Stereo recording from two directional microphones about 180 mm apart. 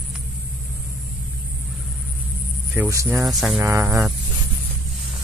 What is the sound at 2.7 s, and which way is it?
Speech, 15° right (ahead or behind).